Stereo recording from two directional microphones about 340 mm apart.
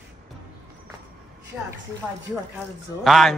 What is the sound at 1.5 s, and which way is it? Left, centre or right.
Speech, centre.